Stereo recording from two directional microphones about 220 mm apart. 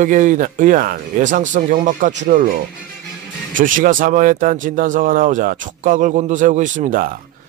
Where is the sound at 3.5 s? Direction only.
35° right (ahead or behind).